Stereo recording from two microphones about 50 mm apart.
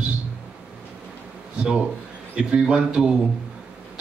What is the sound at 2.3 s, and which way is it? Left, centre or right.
Speech, centre.